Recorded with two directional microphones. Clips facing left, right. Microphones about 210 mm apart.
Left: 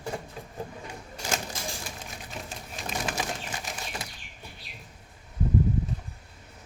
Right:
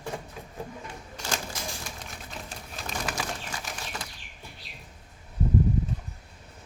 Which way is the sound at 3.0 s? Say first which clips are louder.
Left 1 dB; 20° left (ahead or behind).